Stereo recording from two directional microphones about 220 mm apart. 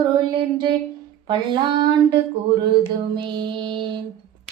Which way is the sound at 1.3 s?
20° right (ahead or behind).